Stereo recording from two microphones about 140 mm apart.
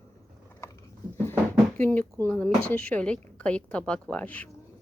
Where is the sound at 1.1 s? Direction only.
15° left (ahead or behind).